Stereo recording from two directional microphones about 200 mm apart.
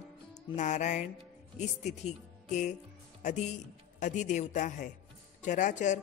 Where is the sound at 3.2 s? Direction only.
40° left (ahead or behind).